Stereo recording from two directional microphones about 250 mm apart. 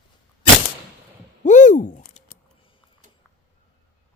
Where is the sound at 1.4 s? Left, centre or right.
Left.